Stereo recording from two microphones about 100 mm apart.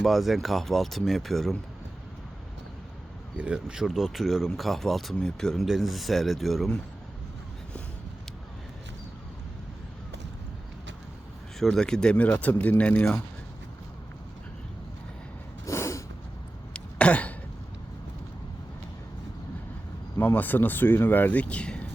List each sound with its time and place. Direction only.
0.0 s speech: centre (ahead or behind)
3.3 s speech: 10° right (ahead or behind)
11.6 s speech: 5° left (ahead or behind)
15.6 s snort: 30° left (ahead or behind)
16.7 s throat clearing: 15° left (ahead or behind)
20.1 s speech: 20° left (ahead or behind)